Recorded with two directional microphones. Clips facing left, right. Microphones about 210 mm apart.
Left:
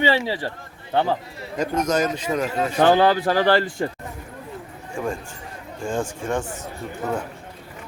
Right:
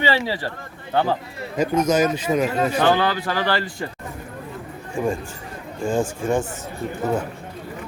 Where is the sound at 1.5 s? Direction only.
5° right (ahead or behind).